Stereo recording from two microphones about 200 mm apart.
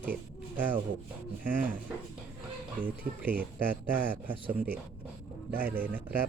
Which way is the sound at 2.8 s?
45° right (ahead or behind).